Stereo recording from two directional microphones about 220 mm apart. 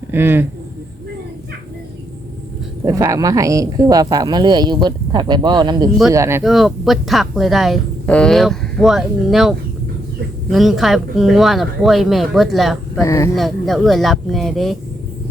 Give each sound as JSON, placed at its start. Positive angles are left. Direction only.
{"t": 0.1, "sound": "speech", "side_deg": -10}
{"t": 2.8, "sound": "speech", "side_deg": -15}
{"t": 6.4, "sound": "speech", "side_deg": 0}
{"t": 13.0, "sound": "speech", "side_deg": 15}
{"t": 13.3, "sound": "speech", "side_deg": 0}